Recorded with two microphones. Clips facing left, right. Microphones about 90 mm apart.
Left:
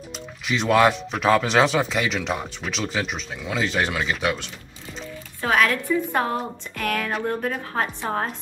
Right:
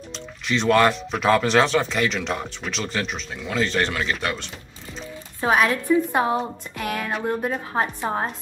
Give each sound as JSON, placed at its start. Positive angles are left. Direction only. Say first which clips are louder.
{"t": 0.5, "sound": "speech", "louder": "even", "side_deg": 5}
{"t": 5.4, "sound": "a woman's voice", "louder": "right 1 dB", "side_deg": -20}